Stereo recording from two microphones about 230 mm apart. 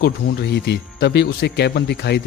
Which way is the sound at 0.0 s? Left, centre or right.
Left.